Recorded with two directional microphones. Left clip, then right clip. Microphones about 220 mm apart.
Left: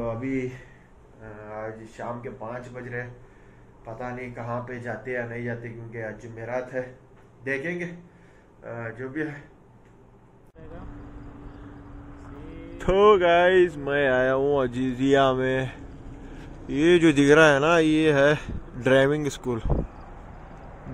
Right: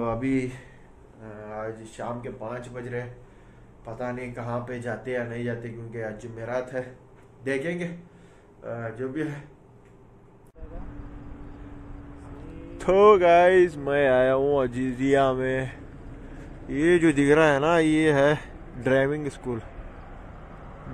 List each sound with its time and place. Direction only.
0.0 s speech: 25° right (ahead or behind)
1.2 s speech: 10° right (ahead or behind)
12.7 s speech: centre (ahead or behind)